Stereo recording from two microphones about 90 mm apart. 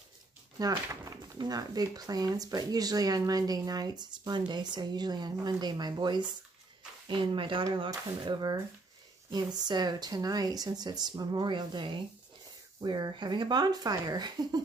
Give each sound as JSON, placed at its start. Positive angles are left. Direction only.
{"t": 0.6, "sound": "speech", "side_deg": -45}
{"t": 7.1, "sound": "speech", "side_deg": -70}
{"t": 8.3, "sound": "speech", "side_deg": -55}